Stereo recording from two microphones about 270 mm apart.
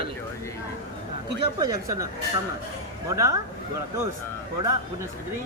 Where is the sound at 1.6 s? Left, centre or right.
Centre.